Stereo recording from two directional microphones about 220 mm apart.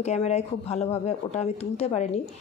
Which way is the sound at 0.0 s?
30° left (ahead or behind).